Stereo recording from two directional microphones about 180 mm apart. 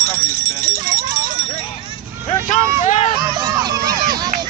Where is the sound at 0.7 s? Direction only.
55° right (ahead or behind).